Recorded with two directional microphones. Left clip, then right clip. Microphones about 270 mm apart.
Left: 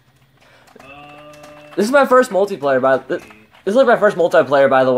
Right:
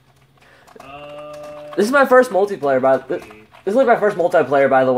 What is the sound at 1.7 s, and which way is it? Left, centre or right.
Speech, centre.